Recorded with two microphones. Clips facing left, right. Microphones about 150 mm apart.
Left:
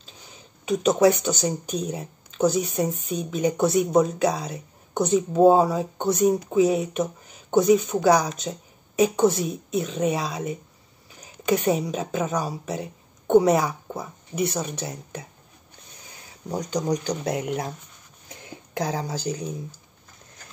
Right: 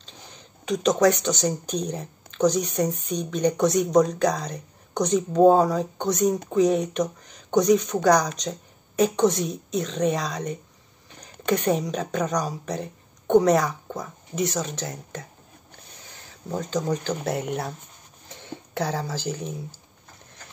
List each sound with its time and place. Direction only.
0.0 s a woman's voice: 5° left (ahead or behind)
16.4 s speech: 15° left (ahead or behind)
18.3 s a sound: 10° left (ahead or behind)